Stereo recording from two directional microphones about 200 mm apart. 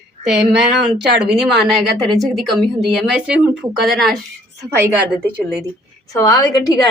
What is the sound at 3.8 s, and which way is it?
Speech, centre (ahead or behind).